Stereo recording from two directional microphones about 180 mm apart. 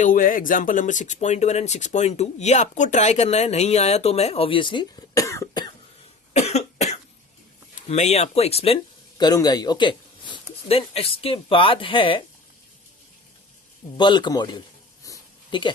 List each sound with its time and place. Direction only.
0.0 s speech: 50° left (ahead or behind); by 5.7 s 20° left (ahead or behind)
6.3 s cough: 35° left (ahead or behind)
7.8 s speech: 40° left (ahead or behind)
13.9 s a man's voice: 25° left (ahead or behind)
15.0 s a sound: 20° left (ahead or behind)